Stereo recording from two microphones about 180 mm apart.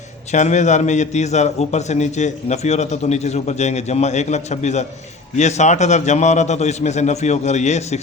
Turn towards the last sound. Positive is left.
turn(degrees=40)  # may be behind; listen again after turning